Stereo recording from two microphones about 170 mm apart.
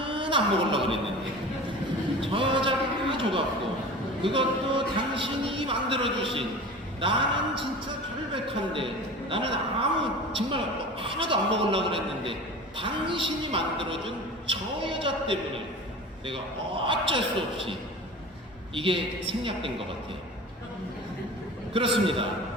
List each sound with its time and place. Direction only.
0.0 s speech: 30° right (ahead or behind)
2.2 s a sound: 30° right (ahead or behind)
4.2 s a man's voice: 30° right (ahead or behind)
21.7 s a man's voice: 30° right (ahead or behind)